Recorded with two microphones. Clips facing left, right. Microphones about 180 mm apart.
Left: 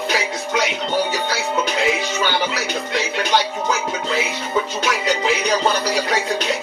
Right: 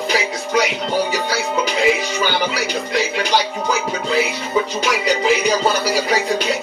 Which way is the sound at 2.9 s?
Centre (ahead or behind).